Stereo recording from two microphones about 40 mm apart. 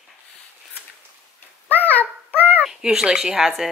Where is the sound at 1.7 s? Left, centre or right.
Left.